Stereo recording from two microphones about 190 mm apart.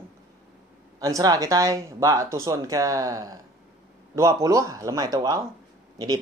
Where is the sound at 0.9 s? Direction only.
20° right (ahead or behind).